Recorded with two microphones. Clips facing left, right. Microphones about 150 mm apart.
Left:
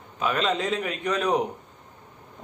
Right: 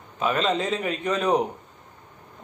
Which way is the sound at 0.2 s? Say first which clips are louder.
Right 1 dB; centre (ahead or behind).